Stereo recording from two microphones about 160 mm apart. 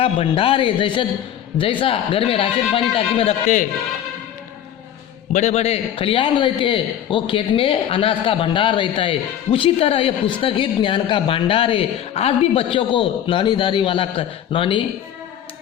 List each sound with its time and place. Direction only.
0.0 s a man's voice: 35° left (ahead or behind)
5.3 s a man's voice: 45° left (ahead or behind)